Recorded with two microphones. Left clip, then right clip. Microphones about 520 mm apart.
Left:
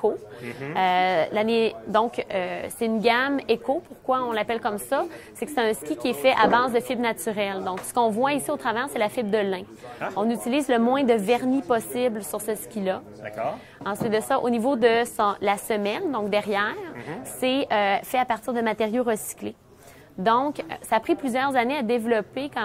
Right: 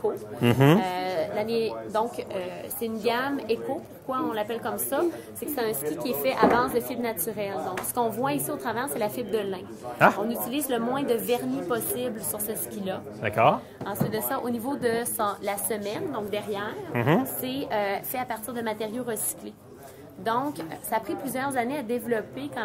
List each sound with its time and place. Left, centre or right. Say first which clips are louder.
0.7 s a woman's voice: left 6 dB; left
13.2 s speech: right 8 dB; right
13.8 s a woman's voice: left 7 dB; left
16.9 s speech: right 12 dB; right
17.4 s a woman's voice: left 6 dB; left